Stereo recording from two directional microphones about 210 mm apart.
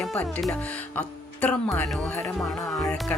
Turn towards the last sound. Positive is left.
turn(degrees=0)  # may be behind; listen again after turning